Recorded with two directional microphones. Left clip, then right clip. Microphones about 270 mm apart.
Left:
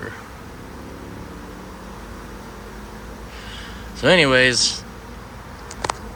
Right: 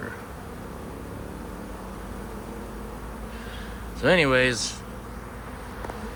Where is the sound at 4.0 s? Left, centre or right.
Centre.